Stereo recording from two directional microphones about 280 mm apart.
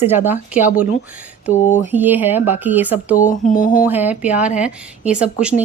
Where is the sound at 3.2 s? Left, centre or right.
Left.